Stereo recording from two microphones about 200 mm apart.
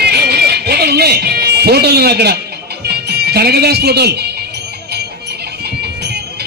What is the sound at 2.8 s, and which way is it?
Speech, 55° right (ahead or behind).